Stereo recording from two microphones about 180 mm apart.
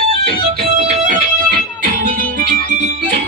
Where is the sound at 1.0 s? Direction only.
45° right (ahead or behind).